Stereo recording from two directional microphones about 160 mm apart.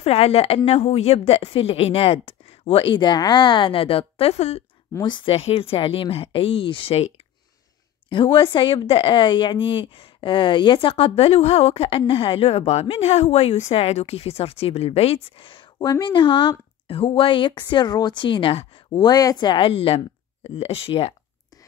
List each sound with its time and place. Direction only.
0.0 s a woman's voice: 40° left (ahead or behind)
5.0 s a woman's voice: 30° left (ahead or behind)
8.1 s a woman's voice: 30° left (ahead or behind)